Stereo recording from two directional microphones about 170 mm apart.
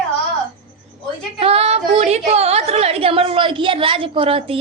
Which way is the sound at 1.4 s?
35° right (ahead or behind).